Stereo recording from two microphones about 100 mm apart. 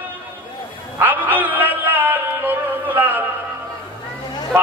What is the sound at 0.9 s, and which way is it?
Music, 15° right (ahead or behind).